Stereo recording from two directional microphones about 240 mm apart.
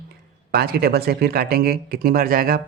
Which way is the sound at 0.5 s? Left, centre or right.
Right.